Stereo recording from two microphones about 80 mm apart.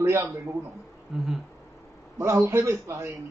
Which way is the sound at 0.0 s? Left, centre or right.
Right.